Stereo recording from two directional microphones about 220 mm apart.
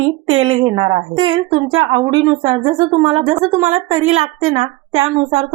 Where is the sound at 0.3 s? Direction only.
25° right (ahead or behind).